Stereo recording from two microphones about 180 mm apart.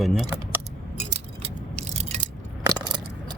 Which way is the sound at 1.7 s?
35° right (ahead or behind).